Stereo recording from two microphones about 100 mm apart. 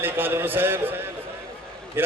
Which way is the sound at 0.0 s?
20° right (ahead or behind).